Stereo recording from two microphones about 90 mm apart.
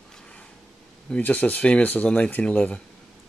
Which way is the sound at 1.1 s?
20° left (ahead or behind).